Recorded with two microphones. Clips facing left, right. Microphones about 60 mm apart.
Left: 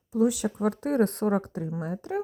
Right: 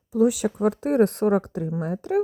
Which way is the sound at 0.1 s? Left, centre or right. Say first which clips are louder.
Right 4 dB; right.